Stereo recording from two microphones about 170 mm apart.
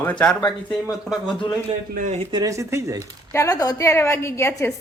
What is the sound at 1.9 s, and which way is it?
Speech, 45° right (ahead or behind).